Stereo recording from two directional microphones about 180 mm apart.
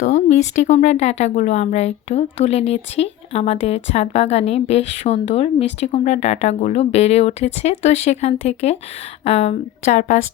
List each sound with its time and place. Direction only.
0.0 s speech: 40° left (ahead or behind)